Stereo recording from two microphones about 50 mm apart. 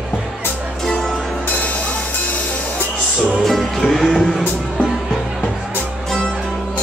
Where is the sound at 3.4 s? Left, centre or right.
Centre.